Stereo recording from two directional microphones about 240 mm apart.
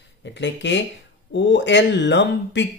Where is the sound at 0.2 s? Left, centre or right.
Left.